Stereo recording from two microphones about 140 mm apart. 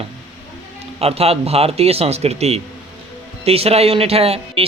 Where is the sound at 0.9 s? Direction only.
45° right (ahead or behind).